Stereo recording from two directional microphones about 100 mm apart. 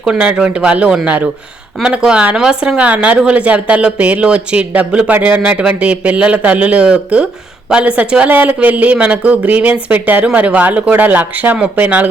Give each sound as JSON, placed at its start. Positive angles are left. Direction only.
{"t": 0.0, "sound": "speech", "side_deg": -10}